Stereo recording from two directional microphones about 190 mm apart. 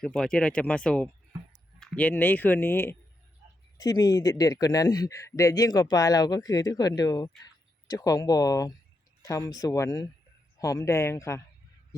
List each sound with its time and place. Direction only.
0.0 s a man's voice: 5° left (ahead or behind)